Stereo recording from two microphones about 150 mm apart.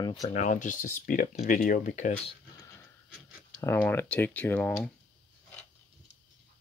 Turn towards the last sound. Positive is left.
turn(degrees=10)  # may be behind; listen again after turning